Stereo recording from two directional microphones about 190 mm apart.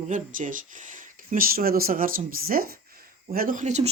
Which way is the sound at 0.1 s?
45° right (ahead or behind).